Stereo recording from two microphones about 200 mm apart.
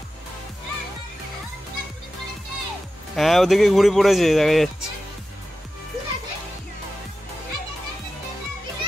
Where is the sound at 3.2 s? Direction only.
Centre (ahead or behind).